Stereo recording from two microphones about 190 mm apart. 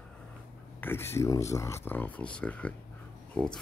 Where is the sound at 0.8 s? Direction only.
10° left (ahead or behind).